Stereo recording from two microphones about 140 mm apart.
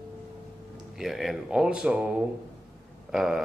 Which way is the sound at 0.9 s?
Centre (ahead or behind).